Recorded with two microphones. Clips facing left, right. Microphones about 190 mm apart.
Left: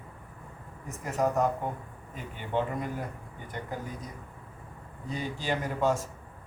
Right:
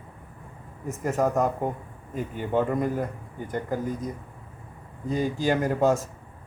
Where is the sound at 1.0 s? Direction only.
45° right (ahead or behind).